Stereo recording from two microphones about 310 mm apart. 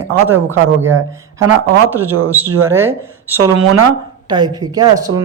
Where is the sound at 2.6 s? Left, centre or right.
Centre.